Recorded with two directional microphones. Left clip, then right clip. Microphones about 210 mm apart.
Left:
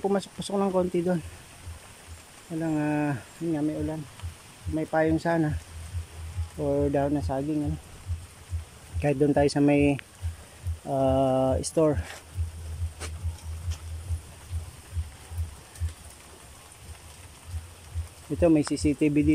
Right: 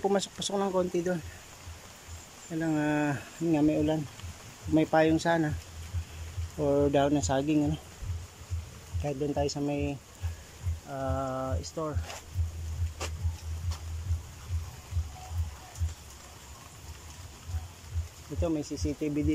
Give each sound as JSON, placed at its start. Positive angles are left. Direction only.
{"t": 0.0, "sound": "speech", "side_deg": 5}
{"t": 2.6, "sound": "speech", "side_deg": 0}
{"t": 4.7, "sound": "speech", "side_deg": 0}
{"t": 6.6, "sound": "speech", "side_deg": 0}
{"t": 9.0, "sound": "speech", "side_deg": 15}
{"t": 18.4, "sound": "speech", "side_deg": 15}